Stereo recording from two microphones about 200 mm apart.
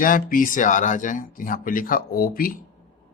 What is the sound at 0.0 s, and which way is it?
Speech, 45° left (ahead or behind).